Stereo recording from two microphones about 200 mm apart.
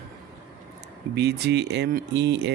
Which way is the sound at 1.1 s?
55° right (ahead or behind).